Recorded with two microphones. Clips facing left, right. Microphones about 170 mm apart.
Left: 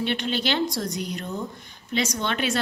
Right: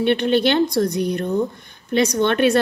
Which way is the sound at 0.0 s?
55° right (ahead or behind).